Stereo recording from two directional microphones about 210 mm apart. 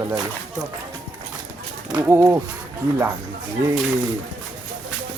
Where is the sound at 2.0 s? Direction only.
10° right (ahead or behind).